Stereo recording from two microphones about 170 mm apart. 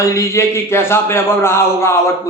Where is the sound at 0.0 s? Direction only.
15° left (ahead or behind).